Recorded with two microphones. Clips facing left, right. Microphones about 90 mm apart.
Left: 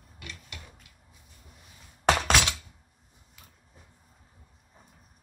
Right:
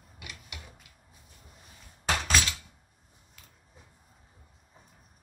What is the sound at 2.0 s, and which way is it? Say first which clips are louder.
Glass: left 5 dB; 70° left (ahead or behind).